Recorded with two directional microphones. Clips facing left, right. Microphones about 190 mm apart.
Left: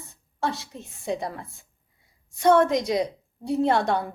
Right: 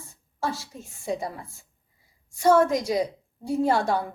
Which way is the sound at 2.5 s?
5° right (ahead or behind).